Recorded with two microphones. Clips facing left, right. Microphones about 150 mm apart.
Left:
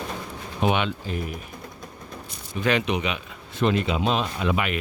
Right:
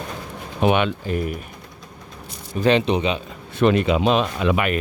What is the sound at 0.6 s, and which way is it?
Speech, 55° right (ahead or behind).